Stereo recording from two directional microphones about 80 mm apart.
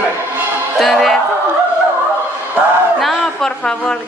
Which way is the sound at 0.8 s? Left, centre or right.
Centre.